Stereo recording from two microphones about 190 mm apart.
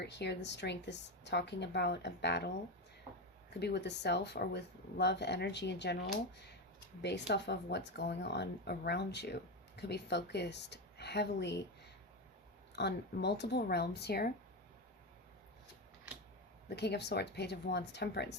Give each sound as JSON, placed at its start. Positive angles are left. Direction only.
{"t": 0.0, "sound": "speech", "side_deg": 65}
{"t": 3.6, "sound": "speech", "side_deg": 60}
{"t": 7.0, "sound": "speech", "side_deg": 65}
{"t": 12.7, "sound": "speech", "side_deg": 60}
{"t": 16.6, "sound": "speech", "side_deg": 65}